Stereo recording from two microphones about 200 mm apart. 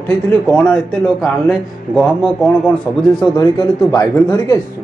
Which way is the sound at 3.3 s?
20° left (ahead or behind).